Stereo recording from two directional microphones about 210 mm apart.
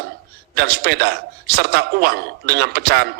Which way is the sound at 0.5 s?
50° right (ahead or behind).